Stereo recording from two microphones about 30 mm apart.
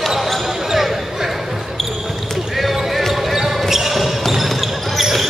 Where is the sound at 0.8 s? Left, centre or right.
Centre.